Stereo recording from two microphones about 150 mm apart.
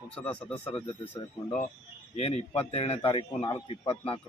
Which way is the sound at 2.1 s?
45° left (ahead or behind).